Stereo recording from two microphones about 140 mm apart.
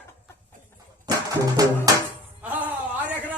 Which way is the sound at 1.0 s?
25° right (ahead or behind).